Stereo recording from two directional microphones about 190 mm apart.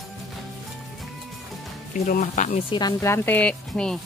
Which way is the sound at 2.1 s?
40° left (ahead or behind).